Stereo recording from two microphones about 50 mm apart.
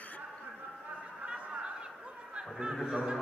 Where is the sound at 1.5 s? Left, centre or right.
Right.